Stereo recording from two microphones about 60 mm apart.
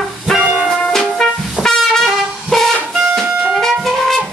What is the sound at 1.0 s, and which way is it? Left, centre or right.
Music, centre.